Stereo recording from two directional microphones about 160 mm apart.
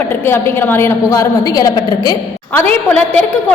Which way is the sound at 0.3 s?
15° left (ahead or behind).